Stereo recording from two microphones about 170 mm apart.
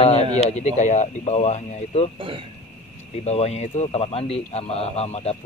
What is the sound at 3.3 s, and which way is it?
Speech, 40° left (ahead or behind).